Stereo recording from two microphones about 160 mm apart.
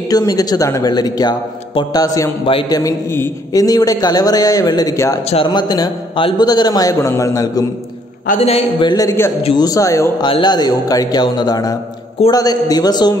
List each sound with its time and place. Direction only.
0.1 s a man's voice: 25° left (ahead or behind)
2.4 s a man's voice: 35° left (ahead or behind)
2.8 s a man's voice: 20° left (ahead or behind)
5.3 s a man's voice: 30° left (ahead or behind)
8.4 s a man's voice: 40° left (ahead or behind); by 9.3 s 20° left (ahead or behind)
9.4 s a man's voice: 30° left (ahead or behind)